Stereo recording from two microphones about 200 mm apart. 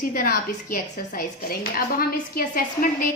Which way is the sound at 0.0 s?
45° left (ahead or behind).